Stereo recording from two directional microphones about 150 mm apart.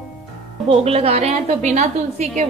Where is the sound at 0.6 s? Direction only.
40° right (ahead or behind).